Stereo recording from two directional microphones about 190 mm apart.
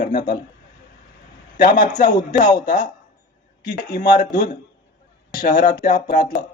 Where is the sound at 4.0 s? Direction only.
45° left (ahead or behind).